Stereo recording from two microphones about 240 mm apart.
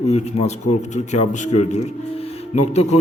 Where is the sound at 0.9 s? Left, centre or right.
Left.